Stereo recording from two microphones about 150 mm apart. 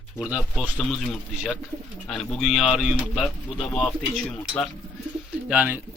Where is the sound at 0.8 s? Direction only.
5° left (ahead or behind).